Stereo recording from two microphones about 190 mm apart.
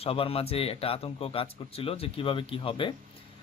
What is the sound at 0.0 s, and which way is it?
A man's voice, 30° left (ahead or behind).